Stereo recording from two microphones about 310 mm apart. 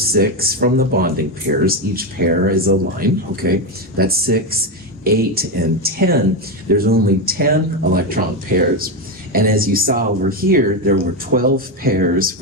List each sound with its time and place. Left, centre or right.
0.0 s speech: right